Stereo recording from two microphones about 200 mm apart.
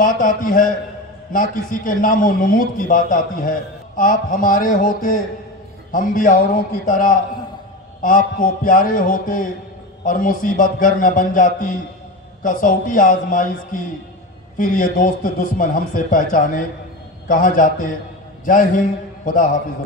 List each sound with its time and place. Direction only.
0.0 s a man's voice: 40° left (ahead or behind)
18.4 s a man's voice: 40° left (ahead or behind)